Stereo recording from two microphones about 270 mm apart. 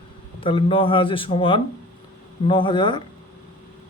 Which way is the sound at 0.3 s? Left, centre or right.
Centre.